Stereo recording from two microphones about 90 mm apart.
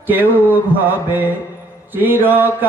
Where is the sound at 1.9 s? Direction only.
20° right (ahead or behind).